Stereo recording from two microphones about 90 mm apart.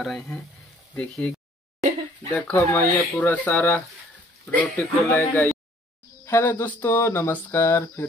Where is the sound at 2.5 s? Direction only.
25° left (ahead or behind).